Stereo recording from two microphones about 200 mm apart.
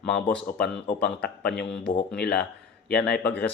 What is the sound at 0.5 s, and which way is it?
Speech, 55° left (ahead or behind).